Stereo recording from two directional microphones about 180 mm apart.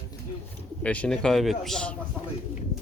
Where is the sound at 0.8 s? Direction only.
5° left (ahead or behind).